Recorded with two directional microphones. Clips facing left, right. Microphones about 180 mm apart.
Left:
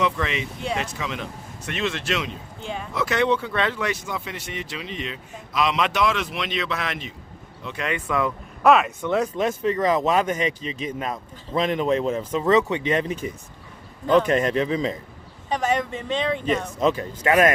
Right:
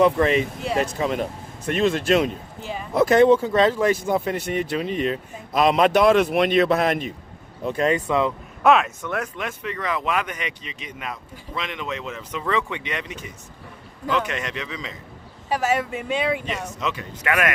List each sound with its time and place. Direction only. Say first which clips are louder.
0.0 s speech: right 7 dB; 45° right (ahead or behind)
2.6 s speech: left 2 dB; 5° right (ahead or behind)
2.9 s speech: right 8 dB; 50° right (ahead or behind); by 8.3 s 30° right (ahead or behind)
8.6 s speech: even; centre (ahead or behind)
9.0 s a man's voice: left 6 dB; 20° left (ahead or behind); by 14.9 s 40° left (ahead or behind)
15.4 s speech: right 1 dB; 5° right (ahead or behind)
16.8 s a man's voice: left 5 dB; 35° left (ahead or behind)